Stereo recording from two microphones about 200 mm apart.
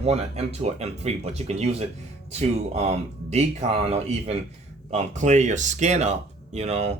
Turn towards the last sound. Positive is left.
turn(degrees=-35)  # may be behind; listen again after turning